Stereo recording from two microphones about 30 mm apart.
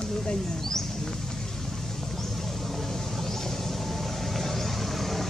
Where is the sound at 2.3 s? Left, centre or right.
Centre.